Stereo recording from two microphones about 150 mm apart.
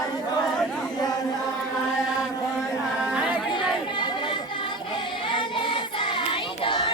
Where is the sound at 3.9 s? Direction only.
30° left (ahead or behind).